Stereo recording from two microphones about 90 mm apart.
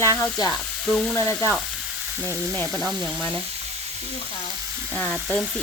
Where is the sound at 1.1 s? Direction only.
30° left (ahead or behind).